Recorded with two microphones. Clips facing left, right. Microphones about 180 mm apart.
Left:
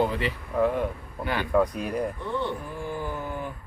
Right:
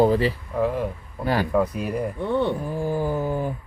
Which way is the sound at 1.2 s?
40° right (ahead or behind).